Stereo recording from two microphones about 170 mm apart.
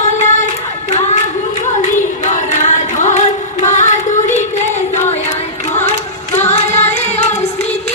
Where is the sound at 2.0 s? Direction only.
45° left (ahead or behind).